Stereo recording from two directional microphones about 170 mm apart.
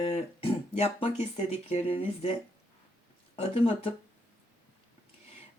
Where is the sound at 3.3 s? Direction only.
35° left (ahead or behind).